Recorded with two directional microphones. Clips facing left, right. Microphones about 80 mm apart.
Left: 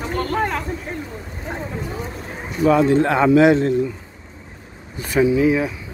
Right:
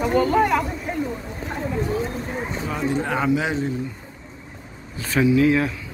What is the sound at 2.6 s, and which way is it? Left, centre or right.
Speech, left.